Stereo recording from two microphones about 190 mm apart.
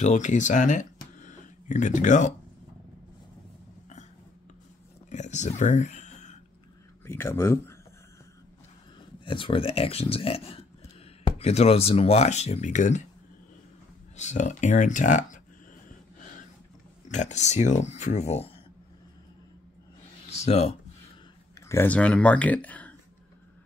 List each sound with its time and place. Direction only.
0.0 s speech: 40° left (ahead or behind)
5.1 s speech: 40° left (ahead or behind)
7.1 s speech: 15° left (ahead or behind)
9.2 s speech: 25° left (ahead or behind)
14.1 s speech: 40° left (ahead or behind)
17.1 s speech: 40° left (ahead or behind)
20.2 s speech: 35° left (ahead or behind)
21.5 s speech: 15° left (ahead or behind)